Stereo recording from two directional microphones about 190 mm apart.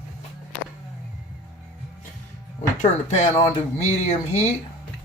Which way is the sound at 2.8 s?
35° left (ahead or behind).